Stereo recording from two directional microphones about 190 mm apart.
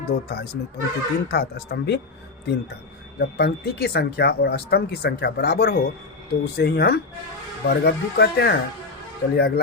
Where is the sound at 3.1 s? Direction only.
60° left (ahead or behind).